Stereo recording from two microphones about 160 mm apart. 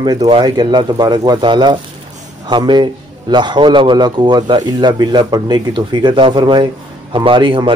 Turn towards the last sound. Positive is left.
turn(degrees=-30)  # may be behind; listen again after turning